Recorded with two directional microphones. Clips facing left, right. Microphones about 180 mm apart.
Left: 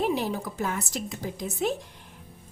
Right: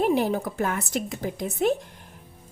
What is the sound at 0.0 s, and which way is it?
A woman's voice, 50° right (ahead or behind).